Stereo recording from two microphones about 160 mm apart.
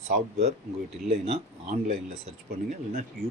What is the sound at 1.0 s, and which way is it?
A man's voice, 40° right (ahead or behind).